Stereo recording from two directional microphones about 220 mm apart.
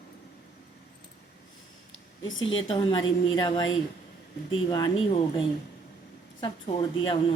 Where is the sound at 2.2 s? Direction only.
60° left (ahead or behind).